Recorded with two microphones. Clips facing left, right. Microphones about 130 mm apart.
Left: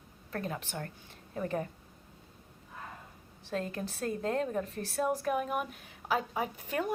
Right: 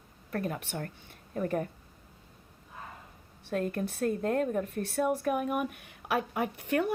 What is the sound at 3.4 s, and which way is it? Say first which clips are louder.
A woman's voice: right 4 dB; 55° right (ahead or behind).